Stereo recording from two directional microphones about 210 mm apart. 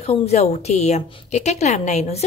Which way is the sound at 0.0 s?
30° left (ahead or behind).